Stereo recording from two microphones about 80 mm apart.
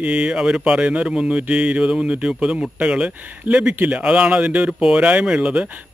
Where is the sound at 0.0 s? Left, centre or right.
Centre.